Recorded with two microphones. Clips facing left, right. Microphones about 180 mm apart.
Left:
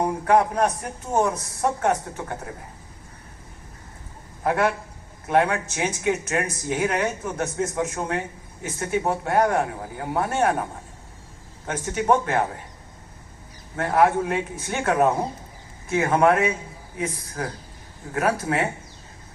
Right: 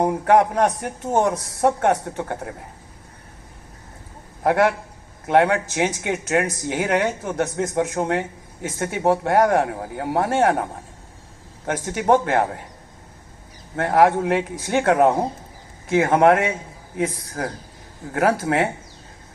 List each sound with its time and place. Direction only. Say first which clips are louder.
0.3 s a man's voice: right 2 dB; 80° right
4.4 s a man's voice: right 4 dB; 80° right
8.7 s speech: right 4 dB; 80° right
11.6 s a man's voice: right 3 dB; 85° right
13.7 s a man's voice: right 3 dB; 75° right (ahead or behind); by 17.2 s 90° right
18.1 s speech: right 4 dB; 75° right (ahead or behind)